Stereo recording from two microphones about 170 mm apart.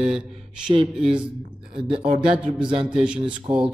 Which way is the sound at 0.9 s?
5° right (ahead or behind).